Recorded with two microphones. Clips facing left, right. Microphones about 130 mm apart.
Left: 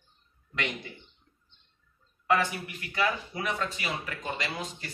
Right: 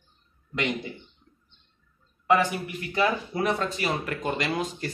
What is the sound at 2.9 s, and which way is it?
A man's voice, 35° right (ahead or behind).